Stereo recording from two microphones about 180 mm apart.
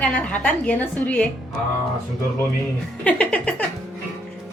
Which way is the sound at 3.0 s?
10° left (ahead or behind).